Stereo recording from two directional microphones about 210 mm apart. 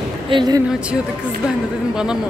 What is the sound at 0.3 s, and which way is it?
Speech, 20° right (ahead or behind).